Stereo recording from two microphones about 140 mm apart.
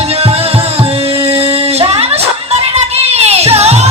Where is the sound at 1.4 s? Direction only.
45° right (ahead or behind).